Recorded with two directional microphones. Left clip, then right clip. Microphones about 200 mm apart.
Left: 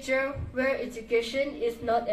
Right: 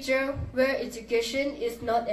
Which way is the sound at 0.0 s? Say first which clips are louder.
Right 1 dB; 55° right (ahead or behind).